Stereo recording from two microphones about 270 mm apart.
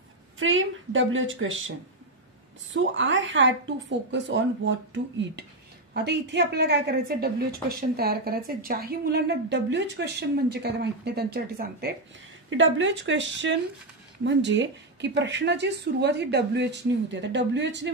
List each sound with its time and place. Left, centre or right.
0.4 s a woman's voice: right
2.7 s a woman's voice: right